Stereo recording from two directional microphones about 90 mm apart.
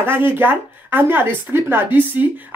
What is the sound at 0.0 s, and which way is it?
Speech, 25° right (ahead or behind).